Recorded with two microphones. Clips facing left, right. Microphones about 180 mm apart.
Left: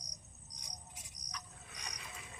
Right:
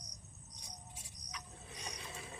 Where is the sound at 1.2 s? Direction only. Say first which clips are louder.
Right 2 dB; 35° left (ahead or behind).